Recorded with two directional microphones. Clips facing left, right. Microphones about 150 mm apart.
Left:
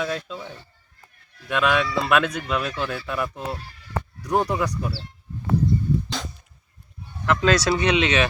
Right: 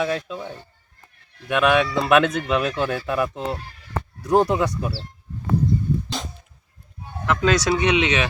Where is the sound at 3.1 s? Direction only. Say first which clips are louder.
Right 4 dB; 20° right (ahead or behind).